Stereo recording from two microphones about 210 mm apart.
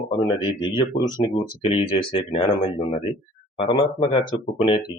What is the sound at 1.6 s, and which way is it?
Speech, 25° left (ahead or behind).